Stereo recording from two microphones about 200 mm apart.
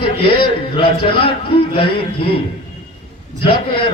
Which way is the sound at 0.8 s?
25° left (ahead or behind).